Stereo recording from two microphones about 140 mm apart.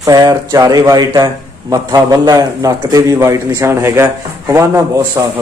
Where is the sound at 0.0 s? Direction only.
25° right (ahead or behind).